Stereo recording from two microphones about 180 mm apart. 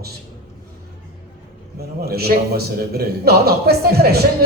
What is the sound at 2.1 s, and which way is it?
A man's voice, 60° right (ahead or behind).